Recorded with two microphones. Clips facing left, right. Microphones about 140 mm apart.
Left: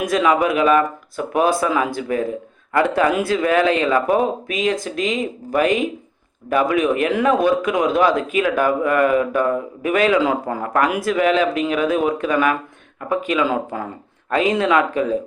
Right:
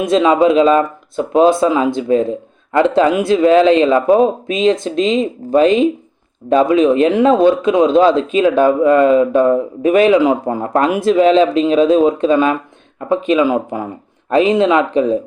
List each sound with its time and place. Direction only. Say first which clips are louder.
0.0 s speech: right 6 dB; 25° right (ahead or behind)